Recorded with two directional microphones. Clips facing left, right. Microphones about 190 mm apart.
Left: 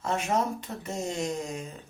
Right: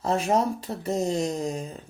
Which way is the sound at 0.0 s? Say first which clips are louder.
Right 4 dB; 35° right (ahead or behind).